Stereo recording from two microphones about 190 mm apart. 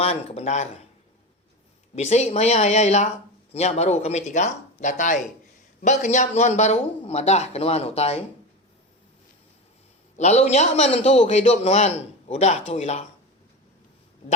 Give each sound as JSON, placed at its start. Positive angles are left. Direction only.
{"t": 0.0, "sound": "a man's voice", "side_deg": 30}
{"t": 2.0, "sound": "a man's voice", "side_deg": 35}
{"t": 10.2, "sound": "a man's voice", "side_deg": 35}